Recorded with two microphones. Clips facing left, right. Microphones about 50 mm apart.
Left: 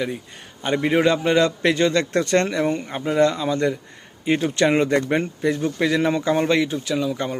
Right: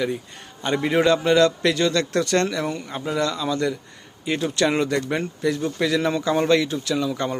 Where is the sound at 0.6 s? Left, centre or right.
Centre.